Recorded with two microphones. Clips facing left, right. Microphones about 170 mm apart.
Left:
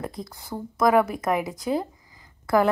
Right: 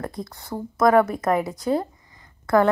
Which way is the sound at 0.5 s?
15° right (ahead or behind).